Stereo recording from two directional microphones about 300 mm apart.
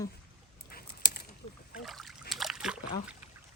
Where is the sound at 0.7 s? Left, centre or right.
Left.